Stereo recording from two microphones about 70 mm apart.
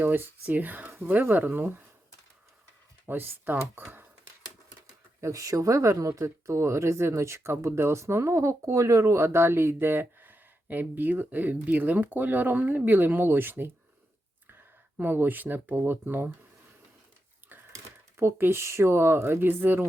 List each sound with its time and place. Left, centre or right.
0.0 s speech: right
3.1 s speech: right
5.2 s speech: right
14.9 s speech: right
17.5 s a sound: right
18.2 s speech: right